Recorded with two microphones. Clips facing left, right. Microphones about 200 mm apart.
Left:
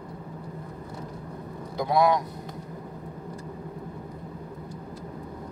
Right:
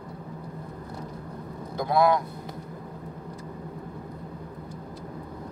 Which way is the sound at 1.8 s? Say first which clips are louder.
Even; 15° left (ahead or behind).